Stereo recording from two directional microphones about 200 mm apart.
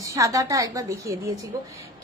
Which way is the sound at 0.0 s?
15° right (ahead or behind).